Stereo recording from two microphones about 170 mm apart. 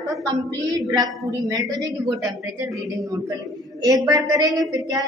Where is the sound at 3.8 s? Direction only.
20° right (ahead or behind).